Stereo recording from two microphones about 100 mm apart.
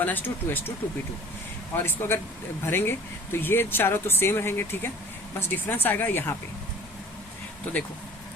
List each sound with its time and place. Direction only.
0.0 s speech: 20° left (ahead or behind)
1.7 s speech: 25° left (ahead or behind)